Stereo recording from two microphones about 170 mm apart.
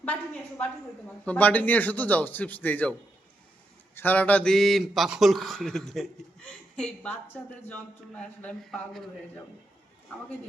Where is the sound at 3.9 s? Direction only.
10° left (ahead or behind).